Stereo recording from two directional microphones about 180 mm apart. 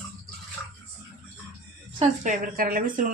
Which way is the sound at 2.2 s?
50° right (ahead or behind).